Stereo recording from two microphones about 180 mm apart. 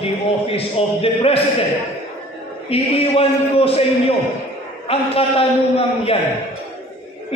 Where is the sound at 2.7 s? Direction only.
35° left (ahead or behind).